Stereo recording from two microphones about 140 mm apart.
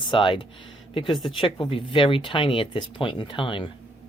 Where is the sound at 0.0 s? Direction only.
35° left (ahead or behind).